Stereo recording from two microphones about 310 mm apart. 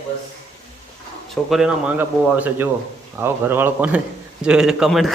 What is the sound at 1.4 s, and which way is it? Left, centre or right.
A man's voice, centre.